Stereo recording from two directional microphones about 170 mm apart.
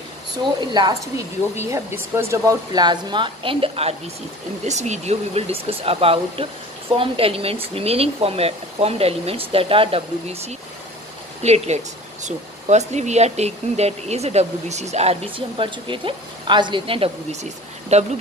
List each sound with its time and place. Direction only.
0.6 s speech: 25° right (ahead or behind); by 18.0 s 40° right (ahead or behind)